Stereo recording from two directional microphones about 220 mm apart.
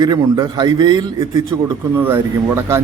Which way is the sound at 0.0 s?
20° right (ahead or behind).